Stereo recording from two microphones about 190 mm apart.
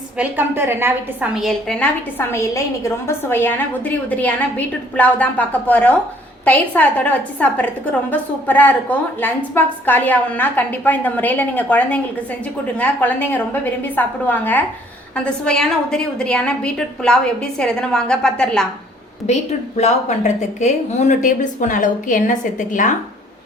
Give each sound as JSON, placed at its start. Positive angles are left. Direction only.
{"t": 0.2, "sound": "a woman's voice", "side_deg": -10}
{"t": 19.3, "sound": "a woman's voice", "side_deg": 35}